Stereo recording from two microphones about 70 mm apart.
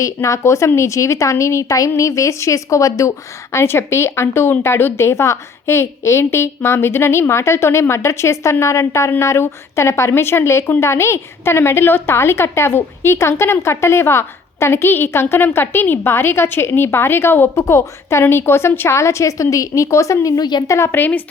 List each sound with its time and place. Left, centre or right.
0.0 s a woman's voice: left
3.5 s a woman's voice: left
20.2 s a woman's voice: left
20.7 s a woman's voice: left